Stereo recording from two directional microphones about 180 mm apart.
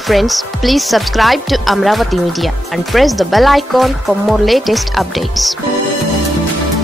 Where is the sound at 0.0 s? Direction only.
Centre (ahead or behind).